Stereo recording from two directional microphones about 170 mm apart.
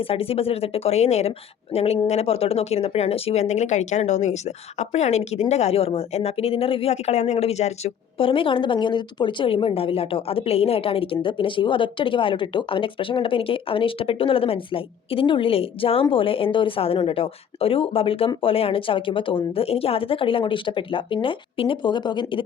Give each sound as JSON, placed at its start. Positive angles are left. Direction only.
{"t": 0.0, "sound": "speech", "side_deg": 35}